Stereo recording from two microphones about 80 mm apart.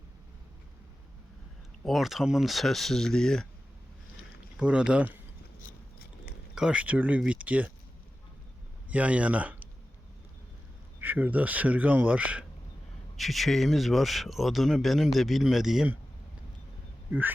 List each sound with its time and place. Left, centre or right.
1.8 s speech: centre
4.5 s speech: centre
6.5 s speech: centre
8.9 s speech: centre
11.0 s a man's voice: right
13.1 s speech: centre
17.1 s speech: right